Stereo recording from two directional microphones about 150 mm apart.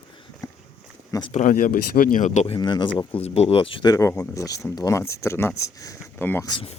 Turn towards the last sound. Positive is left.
turn(degrees=30)  # may be behind; listen again after turning